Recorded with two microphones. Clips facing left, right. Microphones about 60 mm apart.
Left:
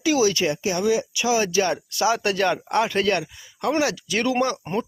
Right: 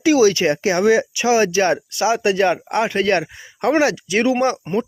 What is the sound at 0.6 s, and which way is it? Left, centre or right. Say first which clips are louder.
Speech: right 7 dB; right.